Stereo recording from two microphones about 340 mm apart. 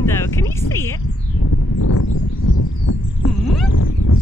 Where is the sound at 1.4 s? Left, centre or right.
Left.